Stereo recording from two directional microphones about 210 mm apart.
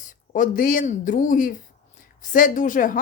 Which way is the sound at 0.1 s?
40° left (ahead or behind).